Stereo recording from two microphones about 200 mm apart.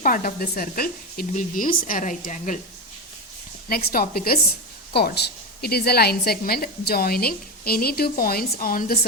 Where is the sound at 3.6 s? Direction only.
50° left (ahead or behind).